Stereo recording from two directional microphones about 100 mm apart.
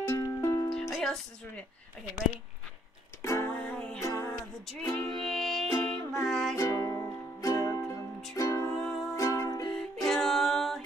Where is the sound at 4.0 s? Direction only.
30° left (ahead or behind).